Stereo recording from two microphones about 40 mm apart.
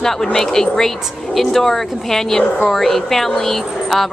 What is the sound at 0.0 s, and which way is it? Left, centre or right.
Speech, centre.